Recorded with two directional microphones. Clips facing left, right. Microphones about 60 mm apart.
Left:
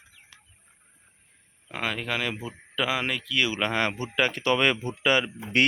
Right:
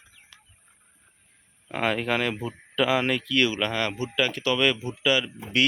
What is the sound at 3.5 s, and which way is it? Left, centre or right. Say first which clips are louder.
Speech: left 1 dB; left.